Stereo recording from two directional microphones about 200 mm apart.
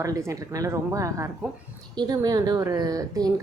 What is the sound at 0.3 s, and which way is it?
A woman's voice, 15° right (ahead or behind).